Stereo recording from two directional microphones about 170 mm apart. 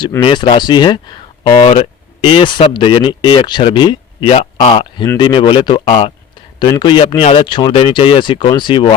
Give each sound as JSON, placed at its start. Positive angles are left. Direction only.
{"t": 0.2, "sound": "speech", "side_deg": 25}
{"t": 4.4, "sound": "a man's voice", "side_deg": 40}